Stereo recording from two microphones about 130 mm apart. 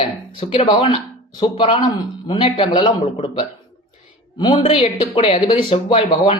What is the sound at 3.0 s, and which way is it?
Speech, 55° left (ahead or behind).